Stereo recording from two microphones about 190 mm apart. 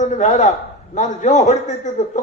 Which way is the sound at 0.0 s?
35° left (ahead or behind).